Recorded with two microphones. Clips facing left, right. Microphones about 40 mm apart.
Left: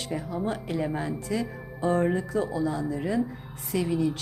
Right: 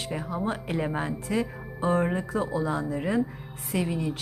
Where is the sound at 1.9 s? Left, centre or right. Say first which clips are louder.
Left 1 dB; centre.